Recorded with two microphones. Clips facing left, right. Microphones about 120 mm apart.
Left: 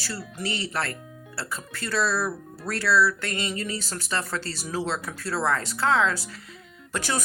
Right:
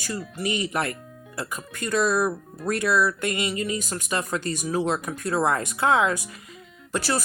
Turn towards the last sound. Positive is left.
turn(degrees=-10)  # may be behind; listen again after turning